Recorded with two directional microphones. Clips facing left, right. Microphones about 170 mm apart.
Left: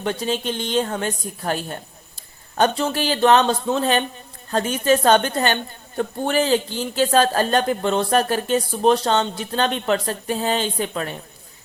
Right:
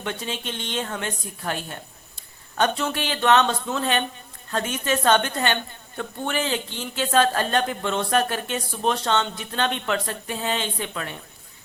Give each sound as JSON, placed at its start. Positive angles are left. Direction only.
{"t": 0.0, "sound": "speech", "side_deg": 35}